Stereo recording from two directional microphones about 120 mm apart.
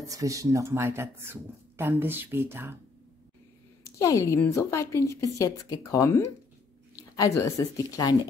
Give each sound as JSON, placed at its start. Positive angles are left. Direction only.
{"t": 0.0, "sound": "speech", "side_deg": -30}
{"t": 3.8, "sound": "a woman's voice", "side_deg": 25}